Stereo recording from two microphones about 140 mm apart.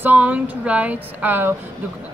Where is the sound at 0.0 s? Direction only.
10° right (ahead or behind).